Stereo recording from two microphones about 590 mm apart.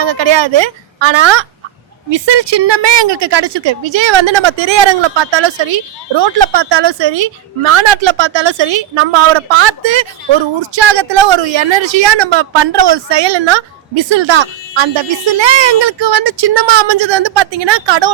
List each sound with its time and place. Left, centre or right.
0.0 s a woman's voice: right